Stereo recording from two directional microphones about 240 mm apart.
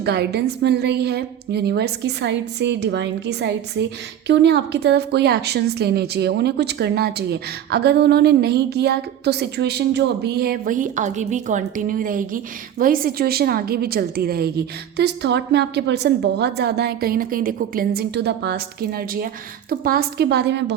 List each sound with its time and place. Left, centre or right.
0.0 s a woman's voice: right